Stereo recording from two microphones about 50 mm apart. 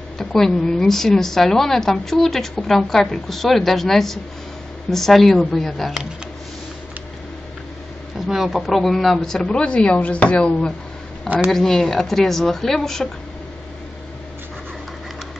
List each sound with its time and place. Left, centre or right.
0.2 s a woman's voice: centre
8.3 s a woman's voice: centre; by 10.7 s left
11.5 s a woman's voice: centre